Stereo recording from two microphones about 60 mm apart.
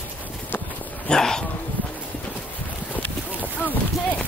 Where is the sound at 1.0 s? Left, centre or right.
Centre.